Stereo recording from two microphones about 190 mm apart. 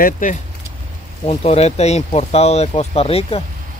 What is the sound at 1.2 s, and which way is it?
Speech, 35° left (ahead or behind).